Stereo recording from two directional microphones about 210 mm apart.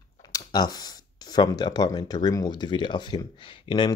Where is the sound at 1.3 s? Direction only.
20° left (ahead or behind).